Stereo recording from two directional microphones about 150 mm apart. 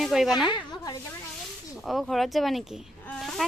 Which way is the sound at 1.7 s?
Centre (ahead or behind).